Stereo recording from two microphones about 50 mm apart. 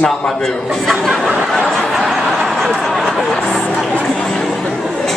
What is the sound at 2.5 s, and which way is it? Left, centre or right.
Speech, centre.